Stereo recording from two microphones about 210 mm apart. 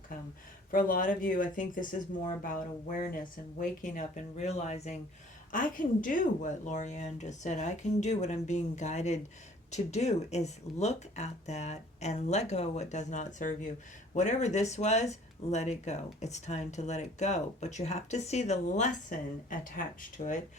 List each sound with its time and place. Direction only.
0.7 s speech: 40° left (ahead or behind)